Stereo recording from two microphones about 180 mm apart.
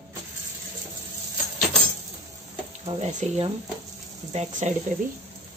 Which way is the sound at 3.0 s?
40° right (ahead or behind).